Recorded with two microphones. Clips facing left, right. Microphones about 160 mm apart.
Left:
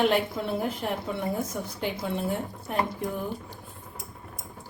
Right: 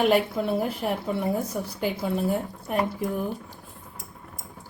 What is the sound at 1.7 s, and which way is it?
Speech, 5° right (ahead or behind).